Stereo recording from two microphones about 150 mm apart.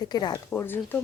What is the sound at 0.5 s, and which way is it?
Speech, 15° left (ahead or behind).